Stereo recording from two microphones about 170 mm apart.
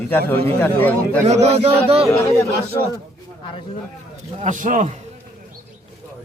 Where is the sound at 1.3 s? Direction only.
40° right (ahead or behind).